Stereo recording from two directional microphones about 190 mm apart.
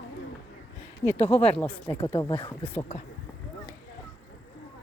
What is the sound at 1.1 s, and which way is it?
Speech, 35° left (ahead or behind).